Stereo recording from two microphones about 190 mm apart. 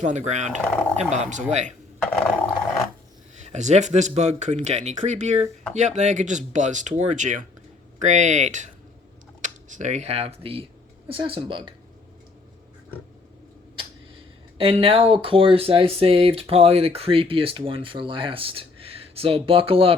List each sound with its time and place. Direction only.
0.0 s speech: 40° right (ahead or behind)
2.0 s a sound: centre (ahead or behind)
3.4 s speech: 35° right (ahead or behind)
14.6 s speech: 30° right (ahead or behind)